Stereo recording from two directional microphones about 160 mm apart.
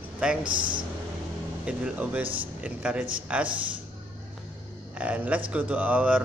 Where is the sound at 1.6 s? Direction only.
10° right (ahead or behind).